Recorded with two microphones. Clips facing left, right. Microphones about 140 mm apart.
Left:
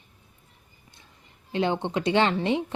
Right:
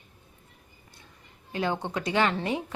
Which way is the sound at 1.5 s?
20° left (ahead or behind).